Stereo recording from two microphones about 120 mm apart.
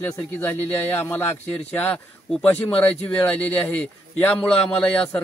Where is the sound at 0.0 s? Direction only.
20° left (ahead or behind).